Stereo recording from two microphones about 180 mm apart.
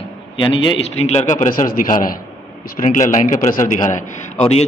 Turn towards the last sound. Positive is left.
turn(degrees=35)  # may be behind; listen again after turning